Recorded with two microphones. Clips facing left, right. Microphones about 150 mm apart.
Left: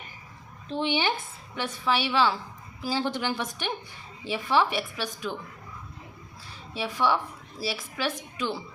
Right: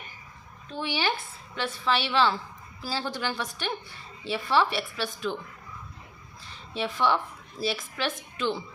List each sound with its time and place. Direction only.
0.7 s a woman's voice: 25° left (ahead or behind)
6.7 s a woman's voice: 10° left (ahead or behind)